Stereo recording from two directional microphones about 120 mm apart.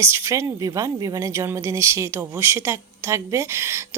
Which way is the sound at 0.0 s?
20° right (ahead or behind).